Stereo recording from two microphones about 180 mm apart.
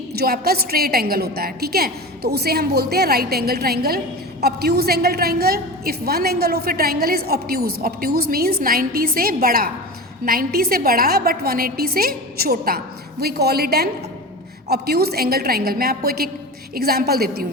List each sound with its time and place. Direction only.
0.1 s a woman's voice: 60° right (ahead or behind)